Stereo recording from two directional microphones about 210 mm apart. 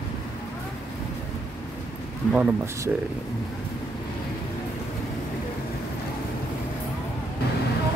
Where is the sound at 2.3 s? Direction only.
5° right (ahead or behind).